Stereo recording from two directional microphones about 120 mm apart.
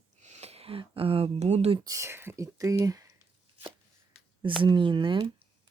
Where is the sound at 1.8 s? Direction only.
25° right (ahead or behind).